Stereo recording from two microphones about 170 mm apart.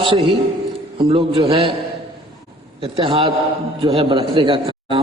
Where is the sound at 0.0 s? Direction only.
30° right (ahead or behind).